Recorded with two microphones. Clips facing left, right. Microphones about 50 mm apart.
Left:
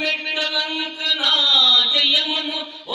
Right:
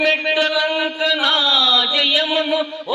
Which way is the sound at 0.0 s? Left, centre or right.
Right.